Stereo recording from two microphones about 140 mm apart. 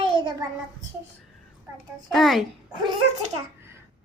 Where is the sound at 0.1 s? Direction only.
35° right (ahead or behind).